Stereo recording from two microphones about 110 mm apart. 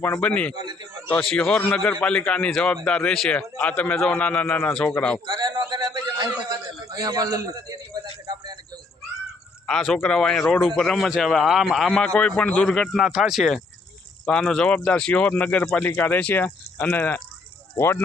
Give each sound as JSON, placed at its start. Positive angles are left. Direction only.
{"t": 0.0, "sound": "a man's voice", "side_deg": 15}
{"t": 0.5, "sound": "a man's voice", "side_deg": -40}
{"t": 1.2, "sound": "a man's voice", "side_deg": 5}
{"t": 5.2, "sound": "a sound", "side_deg": -40}
{"t": 9.6, "sound": "a man's voice", "side_deg": 5}